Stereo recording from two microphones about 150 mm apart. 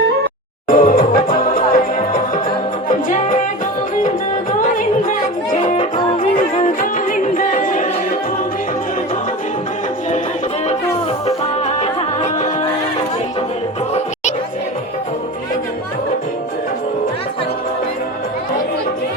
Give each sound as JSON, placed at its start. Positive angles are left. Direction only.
{"t": 0.7, "sound": "music", "side_deg": 70}
{"t": 2.9, "sound": "music", "side_deg": 60}
{"t": 4.8, "sound": "music", "side_deg": 65}
{"t": 11.3, "sound": "music", "side_deg": 45}